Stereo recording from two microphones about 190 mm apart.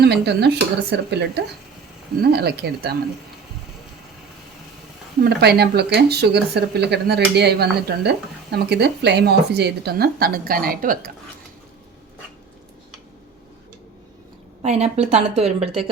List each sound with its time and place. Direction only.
0.0 s speech: 60° right (ahead or behind)
5.2 s speech: 60° right (ahead or behind)
14.6 s a woman's voice: 35° right (ahead or behind)